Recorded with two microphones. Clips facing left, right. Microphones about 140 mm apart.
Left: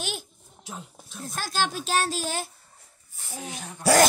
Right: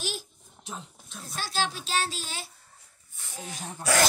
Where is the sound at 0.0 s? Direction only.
60° left (ahead or behind).